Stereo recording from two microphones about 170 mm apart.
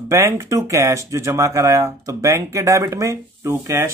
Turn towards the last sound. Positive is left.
turn(degrees=-15)  # may be behind; listen again after turning